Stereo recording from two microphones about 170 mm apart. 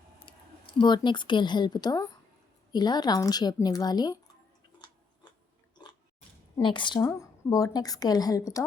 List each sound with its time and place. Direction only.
0.3 s a woman's voice: 30° left (ahead or behind)
6.6 s a woman's voice: 30° left (ahead or behind)